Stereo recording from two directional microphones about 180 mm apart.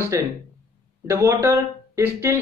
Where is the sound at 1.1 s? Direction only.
15° right (ahead or behind).